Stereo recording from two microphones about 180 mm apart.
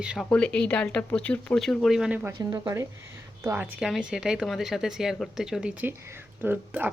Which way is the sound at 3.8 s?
5° right (ahead or behind).